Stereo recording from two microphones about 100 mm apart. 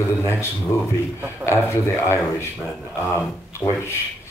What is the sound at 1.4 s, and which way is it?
Speech, 25° left (ahead or behind).